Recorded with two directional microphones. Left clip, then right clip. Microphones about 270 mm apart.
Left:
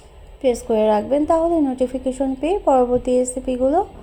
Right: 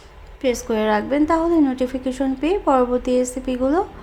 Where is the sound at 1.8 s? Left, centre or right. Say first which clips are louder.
Left 2 dB; centre.